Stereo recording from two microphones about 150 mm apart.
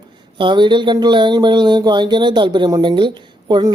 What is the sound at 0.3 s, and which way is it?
Speech, 30° right (ahead or behind).